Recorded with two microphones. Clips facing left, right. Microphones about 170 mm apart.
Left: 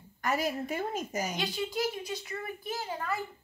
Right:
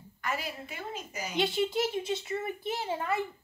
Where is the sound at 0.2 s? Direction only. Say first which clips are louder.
Left 5 dB; 40° left (ahead or behind).